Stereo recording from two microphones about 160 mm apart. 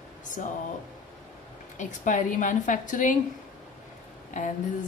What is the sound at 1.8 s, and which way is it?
Speech, 50° left (ahead or behind).